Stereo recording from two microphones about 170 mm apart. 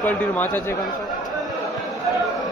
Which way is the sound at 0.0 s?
10° left (ahead or behind).